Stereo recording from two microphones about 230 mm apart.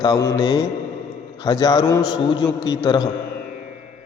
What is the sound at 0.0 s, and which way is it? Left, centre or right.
Mantra, centre.